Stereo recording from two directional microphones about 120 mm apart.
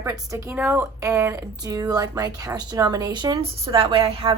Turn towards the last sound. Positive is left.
turn(degrees=-50)  # may be behind; listen again after turning